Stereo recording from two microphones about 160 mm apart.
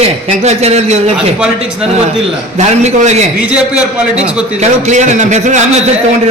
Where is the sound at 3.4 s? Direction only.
5° right (ahead or behind).